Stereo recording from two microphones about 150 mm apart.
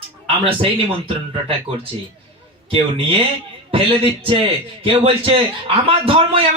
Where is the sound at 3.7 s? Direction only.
35° right (ahead or behind).